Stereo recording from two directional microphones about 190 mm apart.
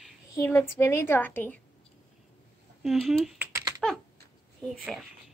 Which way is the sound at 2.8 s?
Centre (ahead or behind).